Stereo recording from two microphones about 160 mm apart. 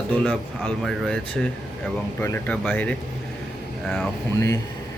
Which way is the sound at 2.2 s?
15° left (ahead or behind).